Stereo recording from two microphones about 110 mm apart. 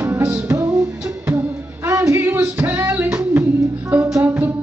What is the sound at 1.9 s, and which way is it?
Music, 25° right (ahead or behind).